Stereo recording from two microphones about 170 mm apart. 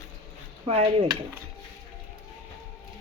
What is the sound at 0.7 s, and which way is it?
Stir, 35° right (ahead or behind).